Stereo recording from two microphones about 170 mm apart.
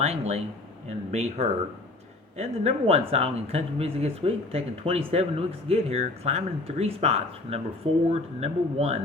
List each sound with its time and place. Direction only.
0.0 s speech: 40° right (ahead or behind)